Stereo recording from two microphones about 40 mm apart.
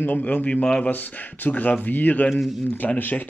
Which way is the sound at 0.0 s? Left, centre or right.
Left.